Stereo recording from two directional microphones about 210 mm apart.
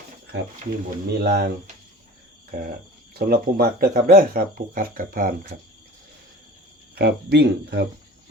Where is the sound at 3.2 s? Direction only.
45° right (ahead or behind).